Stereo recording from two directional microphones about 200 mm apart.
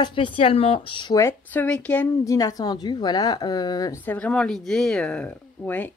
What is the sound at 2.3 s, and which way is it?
A woman's voice, 20° left (ahead or behind).